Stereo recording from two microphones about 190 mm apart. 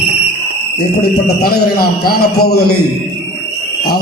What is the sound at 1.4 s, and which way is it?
A man's voice, 55° left (ahead or behind).